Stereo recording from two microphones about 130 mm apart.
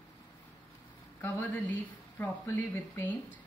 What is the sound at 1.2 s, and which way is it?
Speech, 15° left (ahead or behind).